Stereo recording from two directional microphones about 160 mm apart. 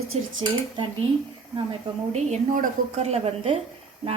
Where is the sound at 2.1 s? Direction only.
50° right (ahead or behind).